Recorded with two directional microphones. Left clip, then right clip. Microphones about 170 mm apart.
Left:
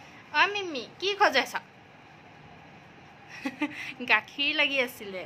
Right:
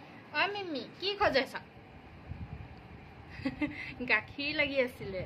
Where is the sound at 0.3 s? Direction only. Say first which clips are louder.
Left 7 dB; 30° left (ahead or behind).